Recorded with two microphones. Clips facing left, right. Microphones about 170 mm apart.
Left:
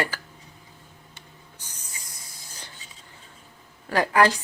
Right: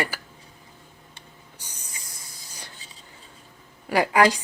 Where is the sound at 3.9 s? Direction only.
15° right (ahead or behind).